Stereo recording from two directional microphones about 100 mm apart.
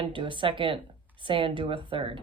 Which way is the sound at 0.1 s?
55° right (ahead or behind).